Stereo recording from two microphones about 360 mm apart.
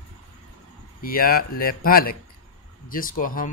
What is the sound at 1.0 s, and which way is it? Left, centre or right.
Speech, left.